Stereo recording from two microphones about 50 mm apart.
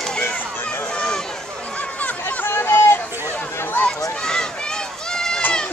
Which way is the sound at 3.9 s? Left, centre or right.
Centre.